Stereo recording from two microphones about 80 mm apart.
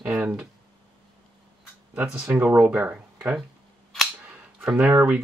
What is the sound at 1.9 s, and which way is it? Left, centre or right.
Speech, centre.